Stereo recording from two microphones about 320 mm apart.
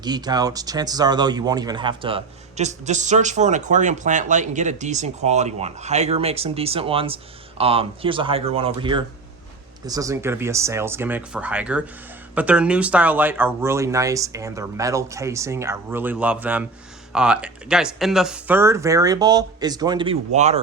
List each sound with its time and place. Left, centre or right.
0.0 s speech: centre